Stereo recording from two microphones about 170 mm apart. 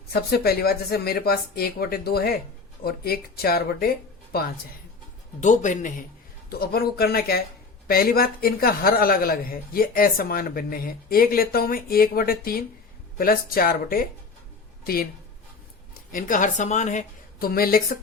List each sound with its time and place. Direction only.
0.1 s speech: 65° left (ahead or behind)
5.4 s a woman's voice: 45° left (ahead or behind)
6.5 s speech: 65° left (ahead or behind)
16.1 s a woman's voice: 50° left (ahead or behind)